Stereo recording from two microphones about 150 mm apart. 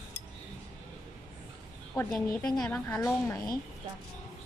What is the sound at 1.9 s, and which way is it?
A woman's voice, 20° left (ahead or behind).